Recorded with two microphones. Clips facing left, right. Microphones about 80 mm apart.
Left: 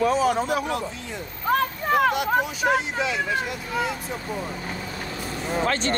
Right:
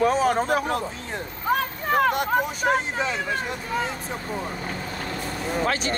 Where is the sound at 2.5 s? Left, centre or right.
Right.